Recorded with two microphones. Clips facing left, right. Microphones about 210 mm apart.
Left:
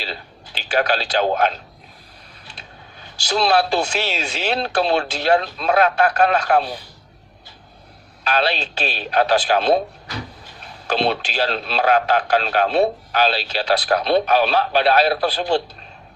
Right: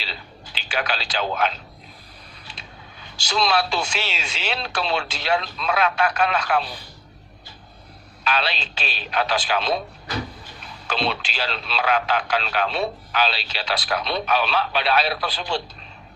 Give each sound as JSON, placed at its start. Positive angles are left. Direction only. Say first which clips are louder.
{"t": 0.1, "sound": "a man's voice", "louder": "left 5 dB", "side_deg": 45}
{"t": 3.2, "sound": "a man's voice", "louder": "left 4 dB", "side_deg": 40}
{"t": 8.3, "sound": "a man's voice", "louder": "left 5 dB", "side_deg": 40}
{"t": 10.9, "sound": "a man's voice", "louder": "left 6 dB", "side_deg": 45}